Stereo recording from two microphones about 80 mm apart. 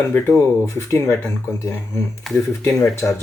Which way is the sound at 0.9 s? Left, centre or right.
Left.